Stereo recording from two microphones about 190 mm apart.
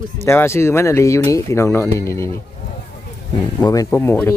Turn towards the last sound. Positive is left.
turn(degrees=10)  # may be behind; listen again after turning